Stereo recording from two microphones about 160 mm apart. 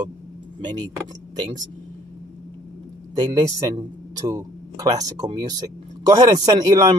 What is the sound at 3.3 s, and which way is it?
Speech, 25° right (ahead or behind).